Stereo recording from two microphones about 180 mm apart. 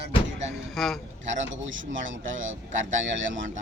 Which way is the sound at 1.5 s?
90° right.